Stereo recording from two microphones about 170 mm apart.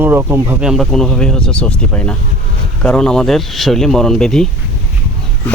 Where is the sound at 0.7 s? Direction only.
Centre (ahead or behind).